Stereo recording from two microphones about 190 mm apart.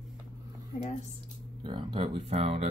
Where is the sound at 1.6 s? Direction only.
25° right (ahead or behind).